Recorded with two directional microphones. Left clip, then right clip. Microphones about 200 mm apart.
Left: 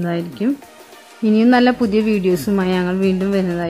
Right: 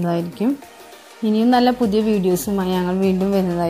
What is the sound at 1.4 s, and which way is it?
Speech, 15° left (ahead or behind).